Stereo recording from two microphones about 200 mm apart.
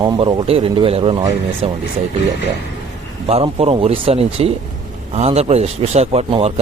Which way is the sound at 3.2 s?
30° right (ahead or behind).